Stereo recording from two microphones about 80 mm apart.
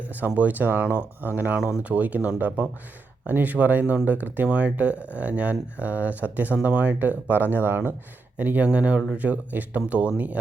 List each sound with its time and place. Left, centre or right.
0.3 s speech: right